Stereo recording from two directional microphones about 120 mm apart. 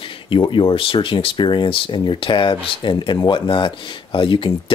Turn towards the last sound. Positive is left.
turn(degrees=45)  # may be behind; listen again after turning